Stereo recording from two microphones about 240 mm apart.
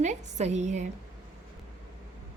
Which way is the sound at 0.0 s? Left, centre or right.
Right.